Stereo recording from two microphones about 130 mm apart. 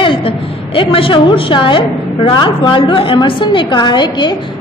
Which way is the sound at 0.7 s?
45° left (ahead or behind).